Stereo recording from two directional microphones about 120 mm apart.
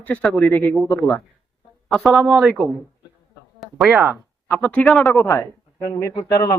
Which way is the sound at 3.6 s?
Centre (ahead or behind).